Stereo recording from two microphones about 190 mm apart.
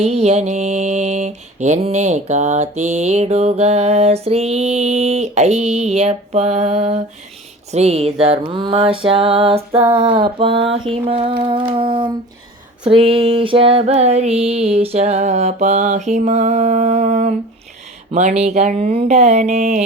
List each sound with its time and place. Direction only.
0.0 s mantra: 35° right (ahead or behind)
7.7 s a sound: 35° right (ahead or behind)
12.9 s mantra: 30° right (ahead or behind)